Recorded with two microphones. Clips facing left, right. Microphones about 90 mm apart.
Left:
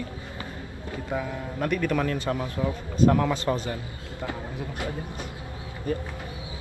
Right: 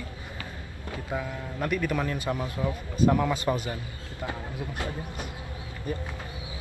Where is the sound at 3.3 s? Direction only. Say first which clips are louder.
Left 1 dB; 15° right (ahead or behind).